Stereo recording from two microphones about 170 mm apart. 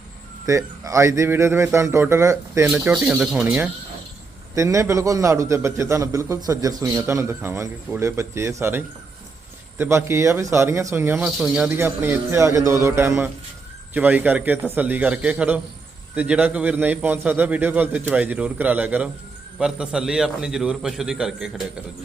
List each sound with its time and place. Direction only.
0.4 s a man's voice: 20° right (ahead or behind)